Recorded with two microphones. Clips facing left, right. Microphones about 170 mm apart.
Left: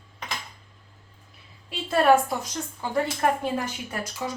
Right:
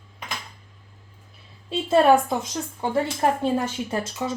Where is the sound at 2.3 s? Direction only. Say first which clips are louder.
Right 4 dB; 25° right (ahead or behind).